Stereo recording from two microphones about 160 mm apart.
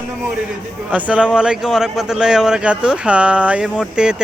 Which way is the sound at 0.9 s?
10° right (ahead or behind).